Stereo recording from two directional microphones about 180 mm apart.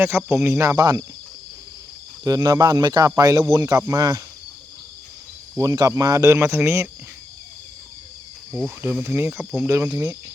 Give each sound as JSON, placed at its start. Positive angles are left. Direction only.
{"t": 0.0, "sound": "speech", "side_deg": -10}
{"t": 2.2, "sound": "speech", "side_deg": -20}
{"t": 5.5, "sound": "speech", "side_deg": -20}
{"t": 8.5, "sound": "speech", "side_deg": -10}
{"t": 9.4, "sound": "speech", "side_deg": 0}
{"t": 9.6, "sound": "speech", "side_deg": -15}